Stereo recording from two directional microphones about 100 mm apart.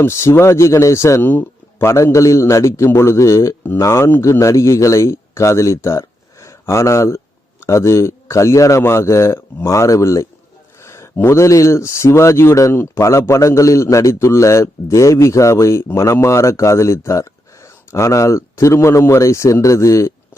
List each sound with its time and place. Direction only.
0.0 s speech: 25° left (ahead or behind)
1.2 s speech: 20° left (ahead or behind)